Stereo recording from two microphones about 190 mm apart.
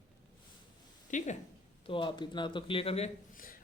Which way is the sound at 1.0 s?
40° left (ahead or behind).